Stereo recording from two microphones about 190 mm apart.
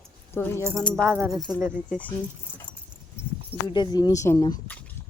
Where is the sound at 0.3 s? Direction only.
10° left (ahead or behind).